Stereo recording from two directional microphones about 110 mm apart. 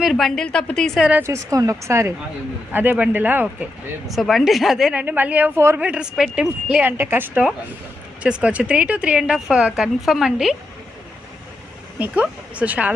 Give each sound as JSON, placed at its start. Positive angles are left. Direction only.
{"t": 0.0, "sound": "a woman's voice", "side_deg": 0}
{"t": 1.2, "sound": "speech", "side_deg": -30}
{"t": 5.0, "sound": "speech", "side_deg": -15}
{"t": 5.9, "sound": "speech", "side_deg": -5}
{"t": 11.9, "sound": "speech", "side_deg": -15}